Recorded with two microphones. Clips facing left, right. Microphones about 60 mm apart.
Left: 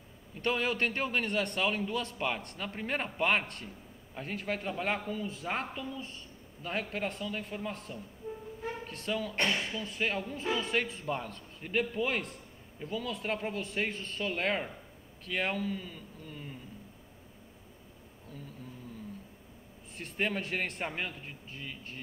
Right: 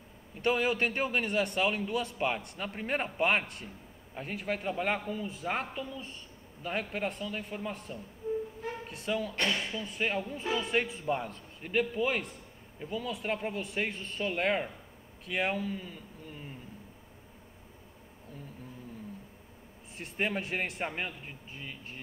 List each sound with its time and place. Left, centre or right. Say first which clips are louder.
0.4 s a man's voice: right 2 dB; centre
9.3 s speech: even; left
9.8 s a man's voice: right 1 dB; centre
20.0 s a man's voice: even; centre